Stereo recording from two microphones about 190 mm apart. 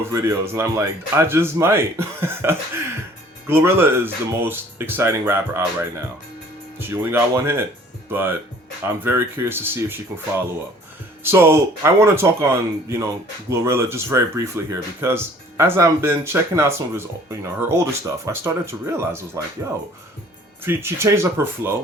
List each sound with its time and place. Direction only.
0.0 s speech: 15° right (ahead or behind)
6.7 s speech: 10° right (ahead or behind)
11.2 s speech: 15° right (ahead or behind)
20.7 s speech: 15° right (ahead or behind)